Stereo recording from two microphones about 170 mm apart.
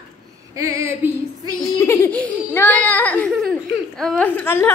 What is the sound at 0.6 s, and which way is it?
Female singing, 15° right (ahead or behind).